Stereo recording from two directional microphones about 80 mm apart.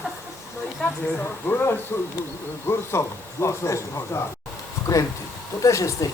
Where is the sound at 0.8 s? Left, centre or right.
Centre.